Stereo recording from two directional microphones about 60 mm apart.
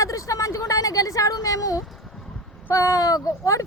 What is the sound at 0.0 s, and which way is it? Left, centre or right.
Speech, left.